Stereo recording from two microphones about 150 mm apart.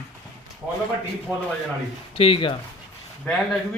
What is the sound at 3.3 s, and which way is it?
Speech, 10° left (ahead or behind).